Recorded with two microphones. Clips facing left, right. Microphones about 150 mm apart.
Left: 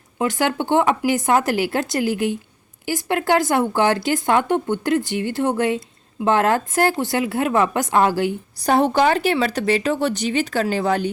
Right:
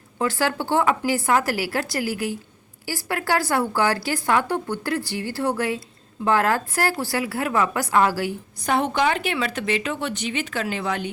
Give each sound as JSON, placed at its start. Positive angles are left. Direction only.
{"t": 0.2, "sound": "speech", "side_deg": 20}
{"t": 8.6, "sound": "speech", "side_deg": 35}